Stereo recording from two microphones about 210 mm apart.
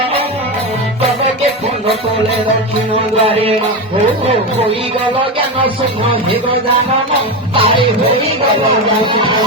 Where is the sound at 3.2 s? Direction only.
25° right (ahead or behind).